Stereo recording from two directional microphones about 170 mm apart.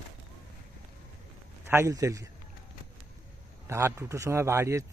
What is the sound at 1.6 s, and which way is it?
Speech, 15° right (ahead or behind).